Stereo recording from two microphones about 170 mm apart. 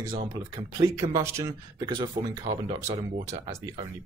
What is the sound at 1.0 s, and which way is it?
Speech, 20° right (ahead or behind).